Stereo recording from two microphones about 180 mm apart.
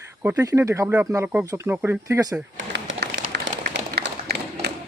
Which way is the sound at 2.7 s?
70° right (ahead or behind).